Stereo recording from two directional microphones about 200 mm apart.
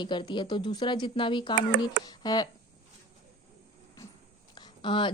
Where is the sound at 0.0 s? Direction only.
20° left (ahead or behind).